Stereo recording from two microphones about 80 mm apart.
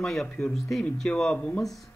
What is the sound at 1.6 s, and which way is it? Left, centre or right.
Speech, centre.